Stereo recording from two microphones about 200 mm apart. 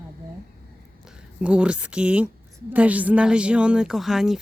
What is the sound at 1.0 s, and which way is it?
Speech, 5° right (ahead or behind).